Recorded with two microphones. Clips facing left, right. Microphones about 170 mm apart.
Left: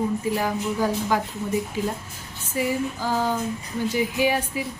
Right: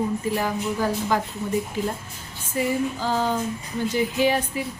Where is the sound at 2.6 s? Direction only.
10° left (ahead or behind).